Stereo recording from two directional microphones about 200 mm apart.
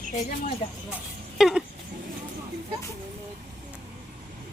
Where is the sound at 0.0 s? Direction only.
40° left (ahead or behind).